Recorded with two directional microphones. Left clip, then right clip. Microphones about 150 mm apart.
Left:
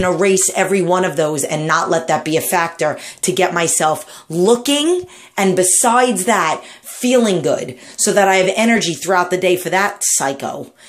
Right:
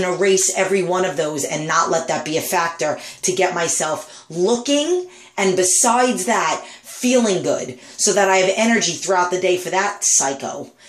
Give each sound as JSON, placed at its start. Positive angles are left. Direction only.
{"t": 0.0, "sound": "speech", "side_deg": 45}
{"t": 3.3, "sound": "speech", "side_deg": 50}
{"t": 5.3, "sound": "a woman's voice", "side_deg": 55}